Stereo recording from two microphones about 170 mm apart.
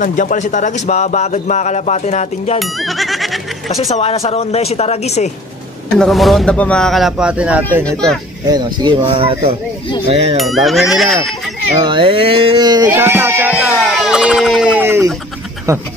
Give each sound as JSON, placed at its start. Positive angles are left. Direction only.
{"t": 0.0, "sound": "a man's voice", "side_deg": 50}
{"t": 2.6, "sound": "speech", "side_deg": 0}
{"t": 3.9, "sound": "a woman's voice", "side_deg": 35}
{"t": 5.9, "sound": "speech", "side_deg": 0}
{"t": 7.8, "sound": "speech", "side_deg": 5}
{"t": 8.5, "sound": "speech", "side_deg": -25}
{"t": 10.3, "sound": "speech", "side_deg": 0}
{"t": 11.8, "sound": "speech", "side_deg": -30}
{"t": 12.8, "sound": "speech", "side_deg": -15}
{"t": 13.6, "sound": "speech", "side_deg": 0}